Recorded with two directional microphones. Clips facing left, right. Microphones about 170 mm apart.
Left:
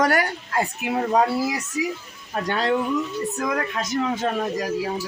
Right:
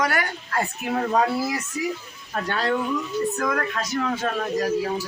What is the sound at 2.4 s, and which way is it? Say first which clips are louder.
Speech: left 2 dB; 20° left (ahead or behind).